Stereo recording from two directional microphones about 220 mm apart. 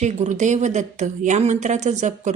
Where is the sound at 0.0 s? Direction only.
30° right (ahead or behind).